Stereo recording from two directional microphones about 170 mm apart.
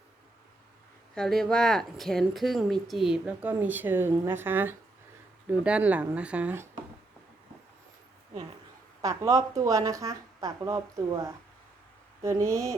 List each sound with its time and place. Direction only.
1.1 s speech: centre (ahead or behind)
9.0 s speech: 20° right (ahead or behind)